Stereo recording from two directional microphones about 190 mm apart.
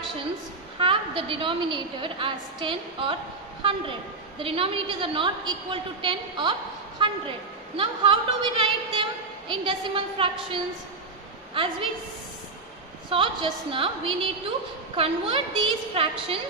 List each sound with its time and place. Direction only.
0.7 s a woman's voice: 30° right (ahead or behind)
4.4 s a woman's voice: 30° right (ahead or behind)
13.1 s a woman's voice: 30° right (ahead or behind)